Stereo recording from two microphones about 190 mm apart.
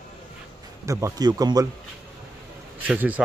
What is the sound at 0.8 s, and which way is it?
Speech, 20° right (ahead or behind).